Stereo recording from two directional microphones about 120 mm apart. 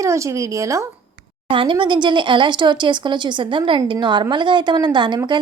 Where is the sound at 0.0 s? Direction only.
25° right (ahead or behind).